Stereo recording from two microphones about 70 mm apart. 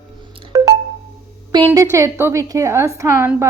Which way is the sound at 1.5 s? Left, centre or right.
Right.